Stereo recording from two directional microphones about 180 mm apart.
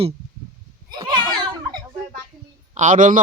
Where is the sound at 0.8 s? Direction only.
25° right (ahead or behind).